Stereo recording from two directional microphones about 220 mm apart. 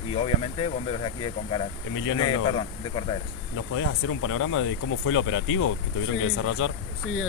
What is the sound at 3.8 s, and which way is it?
Speech, 70° left (ahead or behind).